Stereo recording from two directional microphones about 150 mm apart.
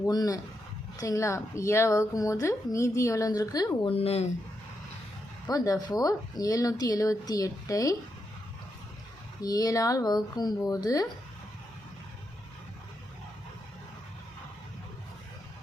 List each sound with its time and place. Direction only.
0.0 s a woman's voice: 25° left (ahead or behind)
3.8 s speech: 40° left (ahead or behind)
5.5 s a woman's voice: 25° left (ahead or behind)
9.4 s a woman's voice: 25° left (ahead or behind)